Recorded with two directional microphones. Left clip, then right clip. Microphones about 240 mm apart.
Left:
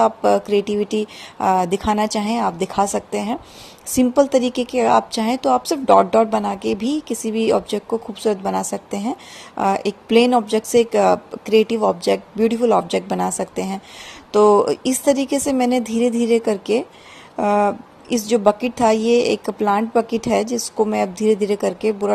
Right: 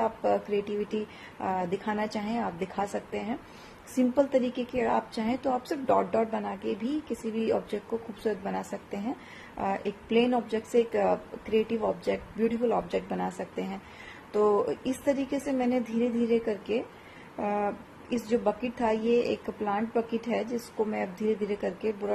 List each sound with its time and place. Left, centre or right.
0.0 s a woman's voice: left